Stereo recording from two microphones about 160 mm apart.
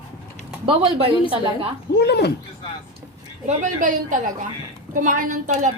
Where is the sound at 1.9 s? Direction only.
90° left.